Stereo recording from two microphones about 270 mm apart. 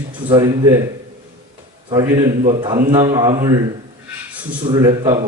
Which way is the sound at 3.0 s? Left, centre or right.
Centre.